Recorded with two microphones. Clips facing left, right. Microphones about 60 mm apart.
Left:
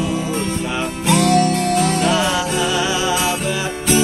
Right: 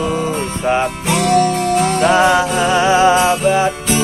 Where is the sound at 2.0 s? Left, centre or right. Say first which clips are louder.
Right 6 dB; right.